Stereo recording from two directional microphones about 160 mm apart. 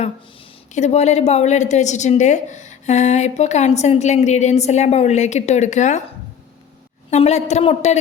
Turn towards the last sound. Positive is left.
turn(degrees=45)  # may be behind; listen again after turning